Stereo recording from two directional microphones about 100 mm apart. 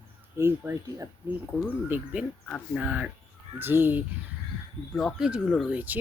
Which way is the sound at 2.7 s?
5° right (ahead or behind).